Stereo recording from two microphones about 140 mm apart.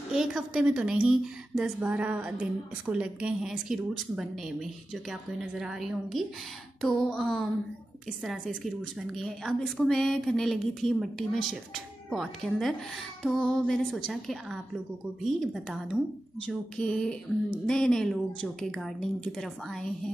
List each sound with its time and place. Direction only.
0.1 s a woman's voice: 5° right (ahead or behind)